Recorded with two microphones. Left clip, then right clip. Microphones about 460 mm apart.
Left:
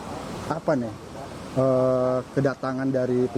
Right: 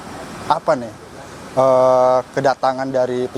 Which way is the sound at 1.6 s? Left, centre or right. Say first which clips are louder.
Right 9 dB; right.